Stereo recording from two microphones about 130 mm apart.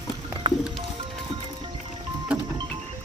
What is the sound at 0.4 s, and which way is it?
Music, 40° right (ahead or behind).